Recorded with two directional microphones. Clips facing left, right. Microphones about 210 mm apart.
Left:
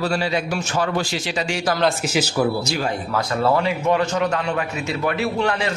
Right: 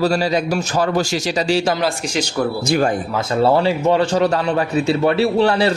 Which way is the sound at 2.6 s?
50° right (ahead or behind).